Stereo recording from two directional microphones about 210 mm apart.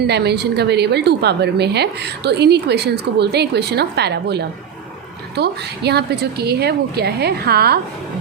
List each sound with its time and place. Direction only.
0.0 s a woman's voice: 50° right (ahead or behind)